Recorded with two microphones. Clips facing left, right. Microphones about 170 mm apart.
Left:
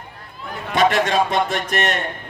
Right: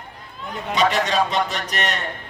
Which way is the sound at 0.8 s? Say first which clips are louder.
Left 3 dB; 50° left (ahead or behind).